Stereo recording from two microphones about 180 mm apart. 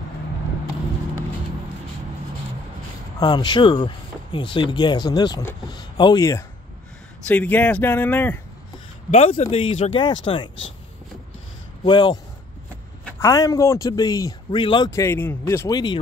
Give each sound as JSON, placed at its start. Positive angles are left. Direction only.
{"t": 3.2, "sound": "speech", "side_deg": 25}
{"t": 7.2, "sound": "speech", "side_deg": 10}
{"t": 9.1, "sound": "speech", "side_deg": 35}
{"t": 11.8, "sound": "speech", "side_deg": 25}
{"t": 13.2, "sound": "speech", "side_deg": 20}
{"t": 14.9, "sound": "speech", "side_deg": 15}